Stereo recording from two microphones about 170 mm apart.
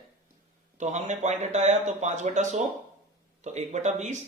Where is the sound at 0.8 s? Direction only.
45° right (ahead or behind).